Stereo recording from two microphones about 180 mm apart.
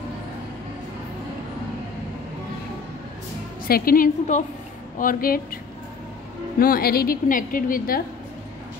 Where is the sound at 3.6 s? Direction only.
55° left (ahead or behind).